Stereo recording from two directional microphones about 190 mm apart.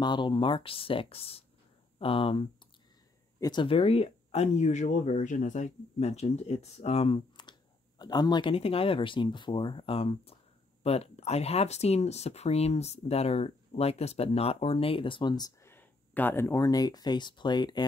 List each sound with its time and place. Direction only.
0.0 s speech: 25° left (ahead or behind)